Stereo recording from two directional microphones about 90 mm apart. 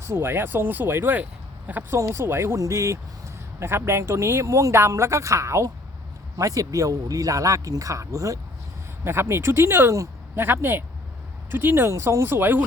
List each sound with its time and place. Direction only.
0.0 s speech: 25° right (ahead or behind)
1.9 s speech: 30° right (ahead or behind)